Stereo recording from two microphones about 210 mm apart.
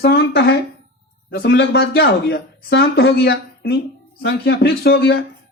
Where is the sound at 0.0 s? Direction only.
50° left (ahead or behind).